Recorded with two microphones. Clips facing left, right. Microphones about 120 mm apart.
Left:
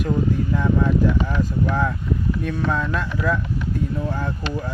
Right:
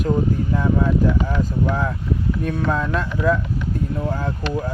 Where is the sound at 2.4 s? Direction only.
45° right (ahead or behind).